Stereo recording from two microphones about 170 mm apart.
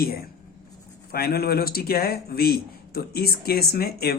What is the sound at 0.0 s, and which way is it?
A man's voice, 65° left (ahead or behind).